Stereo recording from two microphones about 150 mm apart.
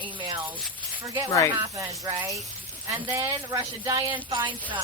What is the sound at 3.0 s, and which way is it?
Speech, 15° right (ahead or behind).